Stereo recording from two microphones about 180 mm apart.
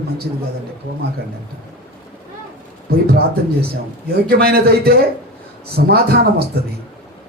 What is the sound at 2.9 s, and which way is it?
A man's voice, 60° right (ahead or behind).